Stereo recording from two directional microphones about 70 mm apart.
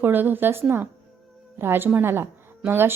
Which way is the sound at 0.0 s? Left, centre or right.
Right.